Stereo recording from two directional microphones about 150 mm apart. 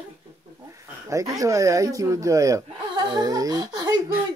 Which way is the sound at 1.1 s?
20° right (ahead or behind).